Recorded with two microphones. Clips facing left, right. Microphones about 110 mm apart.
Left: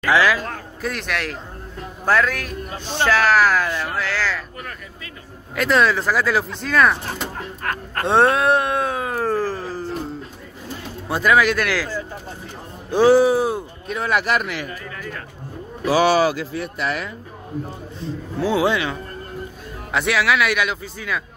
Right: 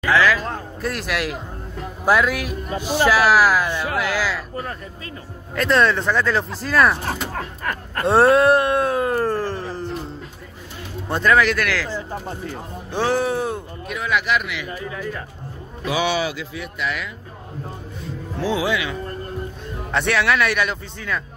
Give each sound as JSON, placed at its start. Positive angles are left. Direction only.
{"t": 0.0, "sound": "speech", "side_deg": 15}
{"t": 0.8, "sound": "a sound", "side_deg": -5}
{"t": 2.0, "sound": "a man's voice", "side_deg": -10}
{"t": 5.6, "sound": "a sound", "side_deg": 5}
{"t": 8.0, "sound": "a sound", "side_deg": 0}
{"t": 11.1, "sound": "speech", "side_deg": 5}
{"t": 12.9, "sound": "speech", "side_deg": 10}
{"t": 13.8, "sound": "speech", "side_deg": 40}
{"t": 14.7, "sound": "a man's voice", "side_deg": -15}
{"t": 15.9, "sound": "speech", "side_deg": 40}
{"t": 18.6, "sound": "speech", "side_deg": 25}
{"t": 19.9, "sound": "a sound", "side_deg": 5}